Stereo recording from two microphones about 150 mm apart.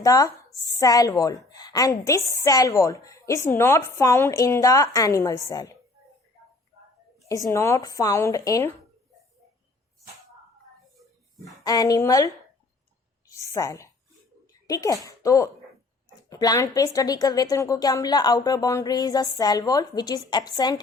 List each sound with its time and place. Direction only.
0.0 s a woman's voice: 25° left (ahead or behind)
7.3 s a woman's voice: 20° left (ahead or behind)
11.6 s a woman's voice: 25° left (ahead or behind)
13.5 s a woman's voice: 20° left (ahead or behind)